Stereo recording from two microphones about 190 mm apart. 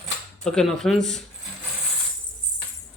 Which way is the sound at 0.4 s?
Centre (ahead or behind).